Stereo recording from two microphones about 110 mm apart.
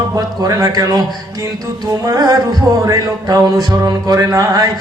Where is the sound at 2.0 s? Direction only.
35° right (ahead or behind).